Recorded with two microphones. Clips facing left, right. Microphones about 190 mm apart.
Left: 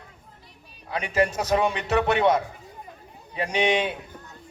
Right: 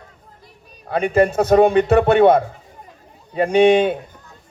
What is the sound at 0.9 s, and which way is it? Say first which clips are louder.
A man's voice: right 8 dB; 55° right (ahead or behind).